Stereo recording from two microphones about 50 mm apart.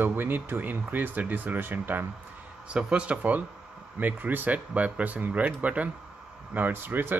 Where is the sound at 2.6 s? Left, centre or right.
Right.